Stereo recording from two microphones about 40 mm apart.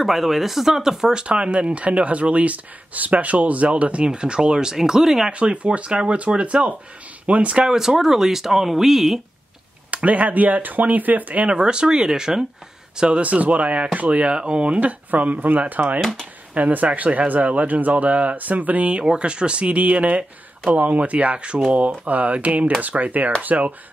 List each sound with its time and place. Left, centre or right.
0.0 s speech: centre
1.1 s speech: right
5.3 s speech: right
7.6 s speech: centre
9.8 s speech: right
11.4 s speech: right
13.2 s speech: right
14.3 s speech: right
16.0 s speech: centre
16.5 s speech: right